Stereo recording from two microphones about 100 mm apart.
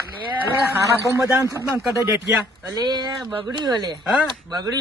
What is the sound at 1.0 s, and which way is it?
Speech, 30° right (ahead or behind).